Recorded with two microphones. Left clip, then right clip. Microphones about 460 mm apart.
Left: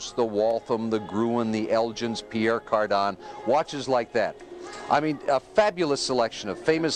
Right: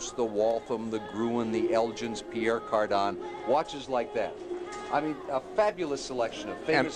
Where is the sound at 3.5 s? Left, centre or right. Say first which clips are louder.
Left 5 dB; left.